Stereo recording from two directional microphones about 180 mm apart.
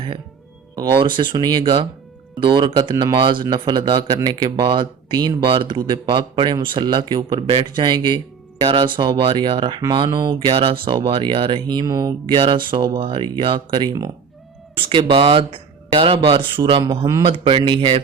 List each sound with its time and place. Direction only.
0.8 s speech: 25° right (ahead or behind)